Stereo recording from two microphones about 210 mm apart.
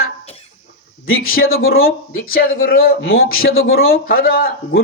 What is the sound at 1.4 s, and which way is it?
Speech, 75° left (ahead or behind).